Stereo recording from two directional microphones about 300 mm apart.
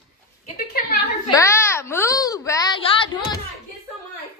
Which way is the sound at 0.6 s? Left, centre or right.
Left.